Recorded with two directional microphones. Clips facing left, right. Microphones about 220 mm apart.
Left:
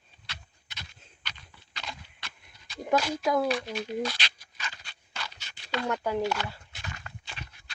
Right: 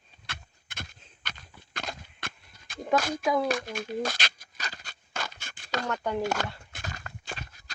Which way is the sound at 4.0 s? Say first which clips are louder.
Even; 45° right (ahead or behind).